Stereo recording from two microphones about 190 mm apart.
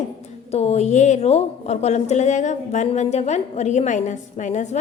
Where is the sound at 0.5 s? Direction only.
35° left (ahead or behind).